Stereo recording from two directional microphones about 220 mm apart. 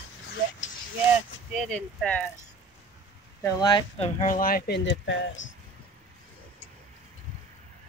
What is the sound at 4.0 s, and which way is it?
Speech, 35° left (ahead or behind).